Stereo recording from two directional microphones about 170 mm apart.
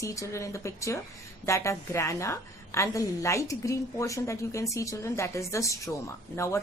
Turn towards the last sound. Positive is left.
turn(degrees=15)  # may be behind; listen again after turning